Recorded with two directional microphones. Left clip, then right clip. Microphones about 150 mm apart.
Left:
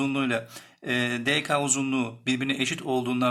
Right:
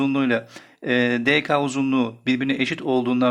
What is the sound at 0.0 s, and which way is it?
Speech, 25° right (ahead or behind).